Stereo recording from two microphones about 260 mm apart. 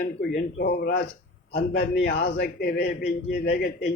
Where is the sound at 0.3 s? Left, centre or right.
Left.